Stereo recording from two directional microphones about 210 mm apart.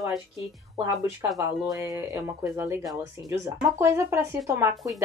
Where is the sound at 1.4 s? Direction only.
15° right (ahead or behind).